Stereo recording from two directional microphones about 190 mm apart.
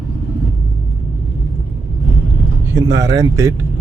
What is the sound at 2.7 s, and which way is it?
Speech, 20° right (ahead or behind).